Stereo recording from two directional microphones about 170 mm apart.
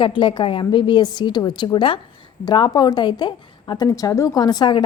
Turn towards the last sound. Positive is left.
turn(degrees=25)  # may be behind; listen again after turning